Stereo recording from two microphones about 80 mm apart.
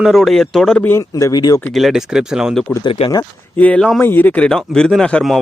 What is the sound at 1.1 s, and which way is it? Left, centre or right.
Speech, left.